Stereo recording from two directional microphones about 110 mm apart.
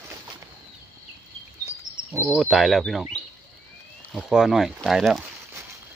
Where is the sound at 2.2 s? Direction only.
5° right (ahead or behind).